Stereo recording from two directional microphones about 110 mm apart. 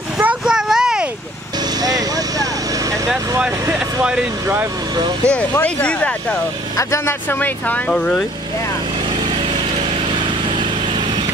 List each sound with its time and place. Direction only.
0.2 s a sound: 10° right (ahead or behind)
1.8 s vehicle: 35° right (ahead or behind)
4.0 s speech: 5° right (ahead or behind)
5.2 s speech: 10° left (ahead or behind)
6.8 s speech: 25° left (ahead or behind); by 8.2 s 10° left (ahead or behind)